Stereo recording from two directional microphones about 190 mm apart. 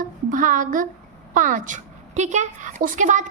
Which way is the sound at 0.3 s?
45° right (ahead or behind).